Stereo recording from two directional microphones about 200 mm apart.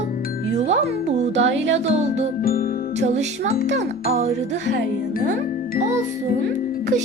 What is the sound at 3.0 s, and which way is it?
Music, 35° right (ahead or behind).